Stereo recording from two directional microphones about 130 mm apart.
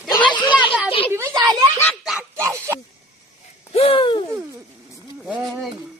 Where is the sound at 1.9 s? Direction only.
5° right (ahead or behind).